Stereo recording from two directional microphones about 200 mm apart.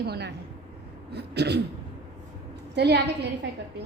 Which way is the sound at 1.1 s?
55° right (ahead or behind).